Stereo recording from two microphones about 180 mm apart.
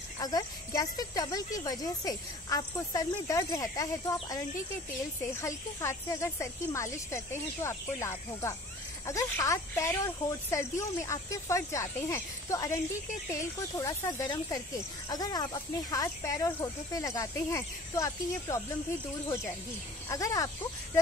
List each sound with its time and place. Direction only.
0.2 s speech: 20° left (ahead or behind)
5.4 s speech: 15° left (ahead or behind)
20.1 s speech: 20° left (ahead or behind)